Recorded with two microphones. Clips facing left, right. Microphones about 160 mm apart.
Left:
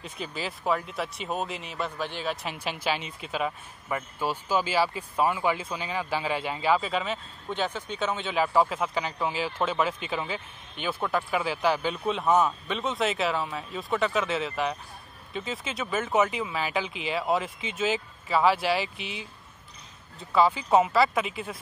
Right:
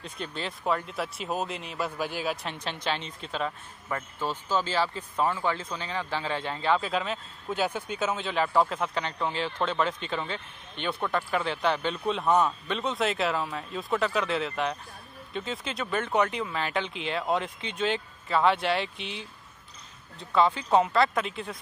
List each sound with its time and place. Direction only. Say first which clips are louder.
0.0 s speech: left 1 dB; 5° left (ahead or behind)
2.4 s speech: left 2 dB; 5° left (ahead or behind)